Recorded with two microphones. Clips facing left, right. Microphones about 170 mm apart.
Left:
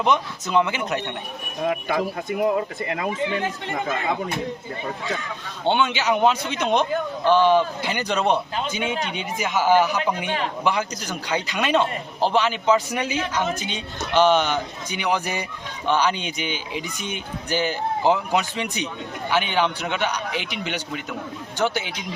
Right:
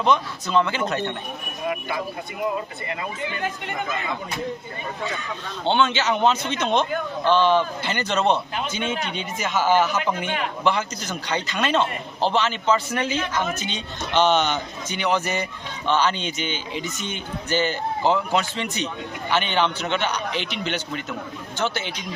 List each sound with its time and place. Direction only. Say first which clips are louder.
0.0 s a man's voice: even; 15° left (ahead or behind)
1.9 s speech: left 5 dB; 70° left (ahead or behind)
2.9 s speech: left 5 dB; 80° left
5.6 s a man's voice: even; 15° left (ahead or behind)